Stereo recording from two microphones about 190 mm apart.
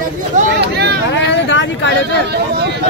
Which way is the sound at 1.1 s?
70° left (ahead or behind).